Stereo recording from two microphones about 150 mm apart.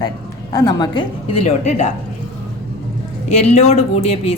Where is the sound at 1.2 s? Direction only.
40° left (ahead or behind).